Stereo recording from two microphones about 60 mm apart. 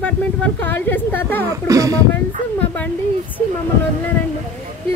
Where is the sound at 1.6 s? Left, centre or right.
Right.